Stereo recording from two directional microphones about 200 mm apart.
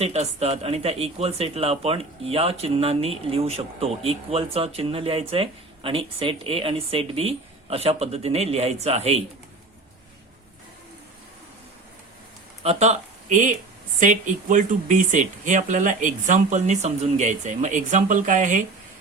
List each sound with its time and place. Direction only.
0.0 s a man's voice: 30° right (ahead or behind)
12.6 s speech: 35° right (ahead or behind)